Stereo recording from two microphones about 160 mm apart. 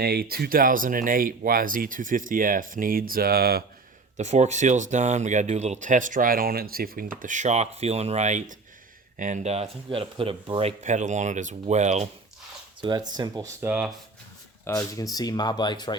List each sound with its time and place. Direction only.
0.0 s speech: 85° right
4.2 s speech: 45° right (ahead or behind)
12.8 s speech: 25° right (ahead or behind)
13.7 s speech: 5° right (ahead or behind)
14.6 s speech: 20° left (ahead or behind)